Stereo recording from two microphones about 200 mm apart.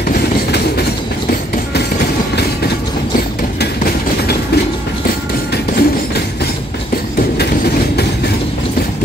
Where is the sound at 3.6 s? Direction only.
55° left (ahead or behind).